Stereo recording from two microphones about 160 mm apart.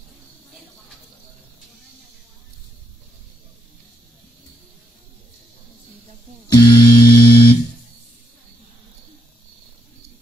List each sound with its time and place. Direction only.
6.5 s music: 25° left (ahead or behind)